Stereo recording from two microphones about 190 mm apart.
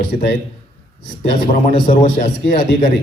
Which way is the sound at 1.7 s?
25° left (ahead or behind).